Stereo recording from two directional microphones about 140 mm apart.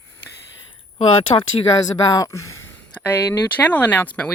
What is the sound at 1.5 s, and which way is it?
Speech, 40° left (ahead or behind).